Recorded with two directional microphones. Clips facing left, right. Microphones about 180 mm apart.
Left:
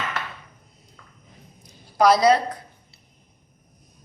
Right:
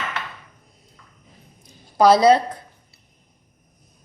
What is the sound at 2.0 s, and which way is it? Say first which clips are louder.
Speech: right 3 dB; 30° right (ahead or behind).